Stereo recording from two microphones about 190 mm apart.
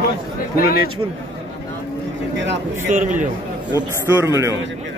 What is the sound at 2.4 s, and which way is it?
Speech, 70° right (ahead or behind).